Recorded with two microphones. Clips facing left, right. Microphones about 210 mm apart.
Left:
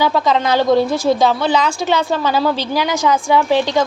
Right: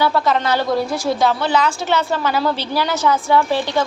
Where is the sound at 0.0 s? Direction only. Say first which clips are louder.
Left 2 dB; 15° left (ahead or behind).